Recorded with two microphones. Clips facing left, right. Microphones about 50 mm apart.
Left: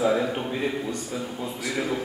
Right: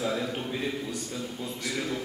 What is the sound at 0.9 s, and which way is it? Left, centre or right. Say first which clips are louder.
A man's voice: left 4 dB; centre.